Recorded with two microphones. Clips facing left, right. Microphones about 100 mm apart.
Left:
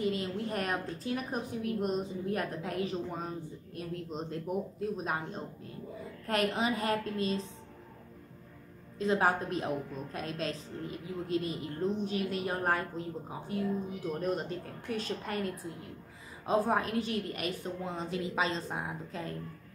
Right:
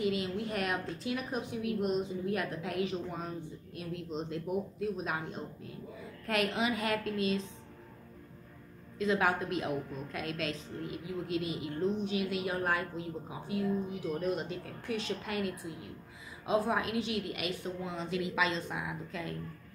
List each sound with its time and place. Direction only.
0.0 s a woman's voice: 35° left (ahead or behind)
8.9 s a woman's voice: 35° left (ahead or behind)